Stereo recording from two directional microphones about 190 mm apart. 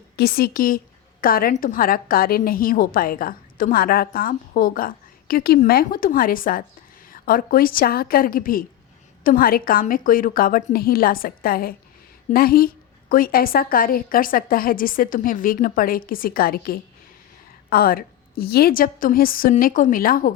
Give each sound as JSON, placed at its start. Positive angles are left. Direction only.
{"t": 0.2, "sound": "a woman's voice", "side_deg": 55}